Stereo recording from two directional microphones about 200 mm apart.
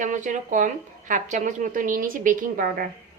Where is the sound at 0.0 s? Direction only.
40° right (ahead or behind).